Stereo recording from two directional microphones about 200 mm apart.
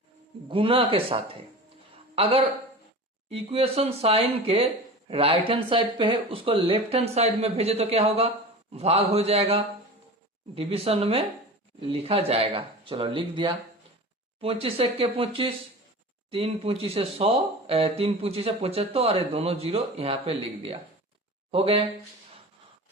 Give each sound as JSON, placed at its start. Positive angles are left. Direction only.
{"t": 0.4, "sound": "a man's voice", "side_deg": -25}